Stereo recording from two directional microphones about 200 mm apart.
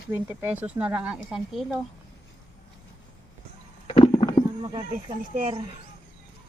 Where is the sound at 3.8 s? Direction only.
25° left (ahead or behind).